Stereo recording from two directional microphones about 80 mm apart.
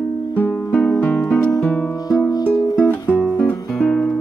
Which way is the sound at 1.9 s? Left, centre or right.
Left.